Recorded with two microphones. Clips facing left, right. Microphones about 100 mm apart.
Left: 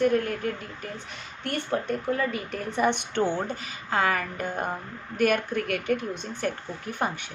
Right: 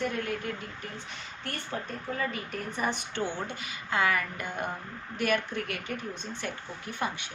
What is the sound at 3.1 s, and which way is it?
A woman's voice, 45° left (ahead or behind).